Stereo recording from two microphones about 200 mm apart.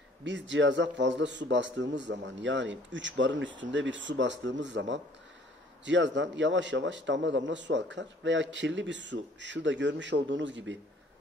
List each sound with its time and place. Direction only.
0.2 s a man's voice: 65° right (ahead or behind)